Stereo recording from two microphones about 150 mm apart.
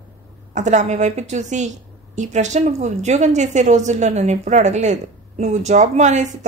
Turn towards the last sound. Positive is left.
turn(degrees=-50)  # may be behind; listen again after turning